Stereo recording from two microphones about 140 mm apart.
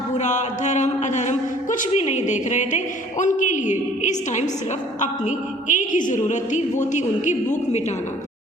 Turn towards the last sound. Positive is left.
turn(degrees=60)  # may be behind; listen again after turning